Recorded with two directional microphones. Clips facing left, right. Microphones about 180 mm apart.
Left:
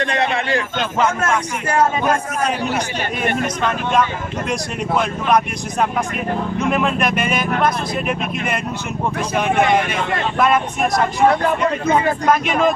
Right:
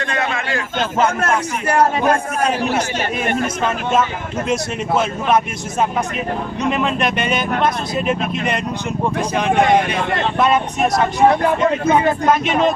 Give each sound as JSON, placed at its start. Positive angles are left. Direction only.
{"t": 0.0, "sound": "a man's voice", "side_deg": 35}
{"t": 6.6, "sound": "speech", "side_deg": -20}
{"t": 10.4, "sound": "speech", "side_deg": 0}
{"t": 11.2, "sound": "speech", "side_deg": -20}